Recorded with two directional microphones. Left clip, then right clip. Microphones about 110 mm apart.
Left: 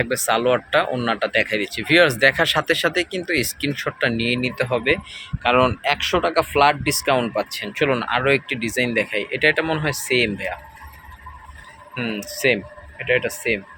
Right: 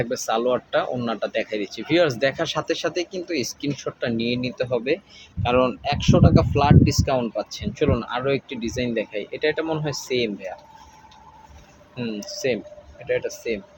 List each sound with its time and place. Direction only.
0.0 s speech: 5° left (ahead or behind)
11.9 s speech: 15° left (ahead or behind)
12.3 s speech: 30° left (ahead or behind)